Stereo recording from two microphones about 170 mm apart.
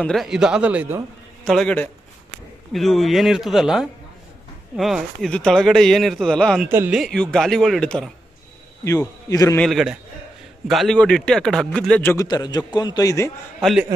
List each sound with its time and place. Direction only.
0.0 s speech: centre (ahead or behind)
1.4 s speech: centre (ahead or behind)
6.7 s speech: 10° right (ahead or behind)
7.0 s speech: 5° left (ahead or behind)
8.8 s a man's voice: 15° left (ahead or behind)
9.6 s speech: centre (ahead or behind)
12.3 s a man's voice: 20° left (ahead or behind)
13.6 s a man's voice: centre (ahead or behind)